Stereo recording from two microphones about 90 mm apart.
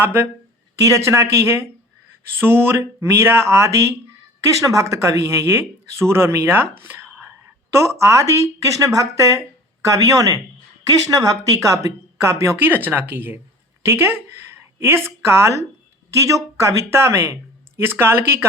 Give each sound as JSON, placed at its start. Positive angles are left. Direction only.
{"t": 0.0, "sound": "speech", "side_deg": -25}
{"t": 0.8, "sound": "speech", "side_deg": -35}
{"t": 12.6, "sound": "a woman's voice", "side_deg": -20}